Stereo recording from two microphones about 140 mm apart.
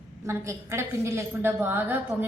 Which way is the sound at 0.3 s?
20° right (ahead or behind).